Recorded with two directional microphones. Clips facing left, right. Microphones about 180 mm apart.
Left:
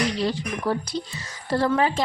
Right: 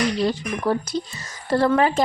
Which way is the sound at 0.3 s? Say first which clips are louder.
Right 3 dB; 50° right (ahead or behind).